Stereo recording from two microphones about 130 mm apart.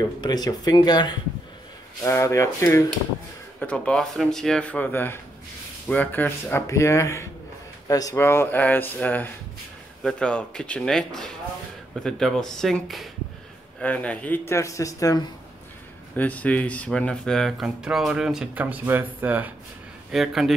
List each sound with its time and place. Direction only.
0.2 s speech: 30° left (ahead or behind)
2.0 s speech: 20° left (ahead or behind)
3.5 s speech: 10° left (ahead or behind); by 15.2 s 25° left (ahead or behind)
16.2 s speech: 10° left (ahead or behind); by 19.5 s 15° right (ahead or behind)
20.1 s speech: centre (ahead or behind)